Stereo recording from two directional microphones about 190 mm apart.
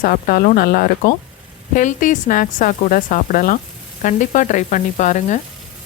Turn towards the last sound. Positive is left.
turn(degrees=40)  # may be behind; listen again after turning